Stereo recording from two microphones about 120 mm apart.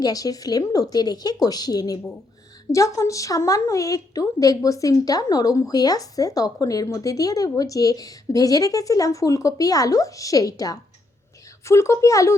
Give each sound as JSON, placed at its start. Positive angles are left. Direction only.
{"t": 0.0, "sound": "a woman's voice", "side_deg": 30}